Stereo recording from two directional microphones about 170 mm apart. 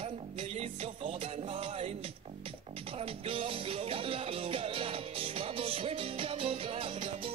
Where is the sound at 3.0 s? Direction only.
30° right (ahead or behind).